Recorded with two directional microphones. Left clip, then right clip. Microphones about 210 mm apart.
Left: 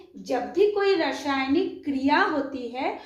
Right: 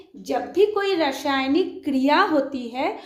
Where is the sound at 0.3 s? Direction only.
50° right (ahead or behind).